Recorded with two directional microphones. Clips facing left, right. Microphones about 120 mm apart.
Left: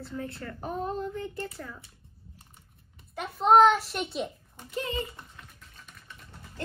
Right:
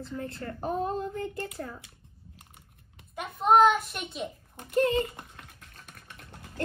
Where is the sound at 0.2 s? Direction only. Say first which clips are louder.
Even; 35° right (ahead or behind).